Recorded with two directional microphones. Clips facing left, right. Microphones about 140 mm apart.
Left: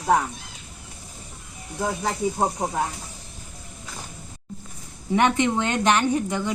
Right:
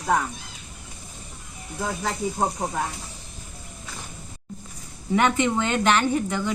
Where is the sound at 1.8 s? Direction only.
15° left (ahead or behind).